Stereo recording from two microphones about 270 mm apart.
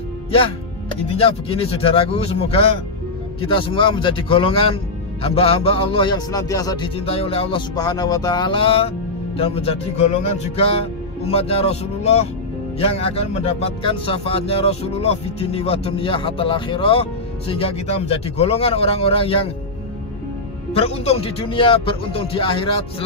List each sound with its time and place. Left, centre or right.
1.1 s speech: left
20.7 s speech: left